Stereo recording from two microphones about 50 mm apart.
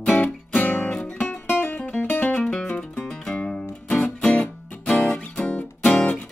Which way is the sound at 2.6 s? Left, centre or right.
Left.